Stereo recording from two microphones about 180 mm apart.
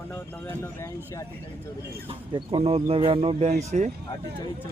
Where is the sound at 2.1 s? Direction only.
30° right (ahead or behind).